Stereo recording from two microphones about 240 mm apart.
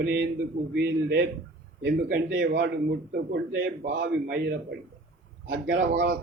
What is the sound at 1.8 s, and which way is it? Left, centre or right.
A man's voice, right.